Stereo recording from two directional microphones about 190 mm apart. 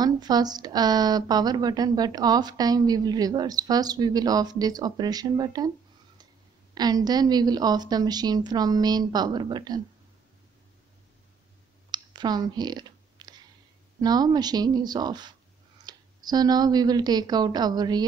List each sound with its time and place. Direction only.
0.0 s a woman's voice: 20° right (ahead or behind)
6.7 s a woman's voice: 20° right (ahead or behind)
11.9 s clicking: 20° right (ahead or behind)
14.0 s a woman's voice: 20° right (ahead or behind)